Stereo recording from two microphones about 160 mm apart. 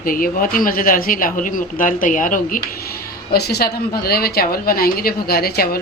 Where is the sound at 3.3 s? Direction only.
85° left.